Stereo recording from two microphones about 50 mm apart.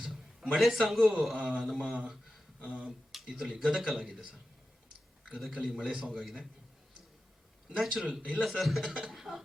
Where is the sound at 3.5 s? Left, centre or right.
Centre.